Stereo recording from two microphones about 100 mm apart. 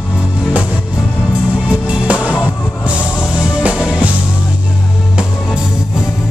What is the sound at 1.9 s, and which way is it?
Music, 10° right (ahead or behind).